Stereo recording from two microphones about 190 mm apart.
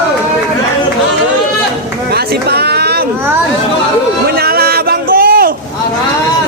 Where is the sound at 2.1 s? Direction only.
55° right (ahead or behind).